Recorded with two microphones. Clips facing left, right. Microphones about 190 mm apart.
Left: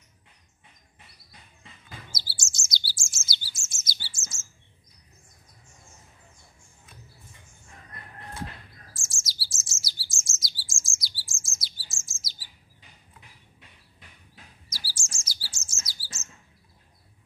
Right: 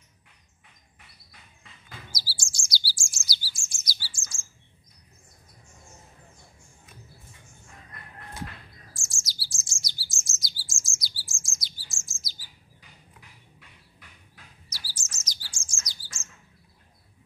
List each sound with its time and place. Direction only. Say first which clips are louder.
1.6 s bird: left 1 dB; 25° left (ahead or behind)
8.9 s bird: even; centre (ahead or behind)
10.2 s chirp: even; centre (ahead or behind)
11.9 s bird: right 1 dB; centre (ahead or behind)
13.6 s a sound: even; 20° left (ahead or behind)
14.9 s chirp: left 1 dB; 10° left (ahead or behind)